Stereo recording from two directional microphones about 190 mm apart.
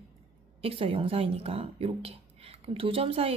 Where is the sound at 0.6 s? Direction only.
30° right (ahead or behind).